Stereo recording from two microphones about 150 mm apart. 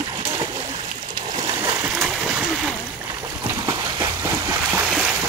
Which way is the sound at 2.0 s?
5° right (ahead or behind).